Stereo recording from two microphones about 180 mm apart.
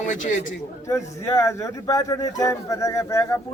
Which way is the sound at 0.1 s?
45° left (ahead or behind).